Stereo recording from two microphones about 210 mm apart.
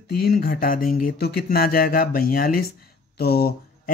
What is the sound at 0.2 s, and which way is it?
Speech, 45° left (ahead or behind).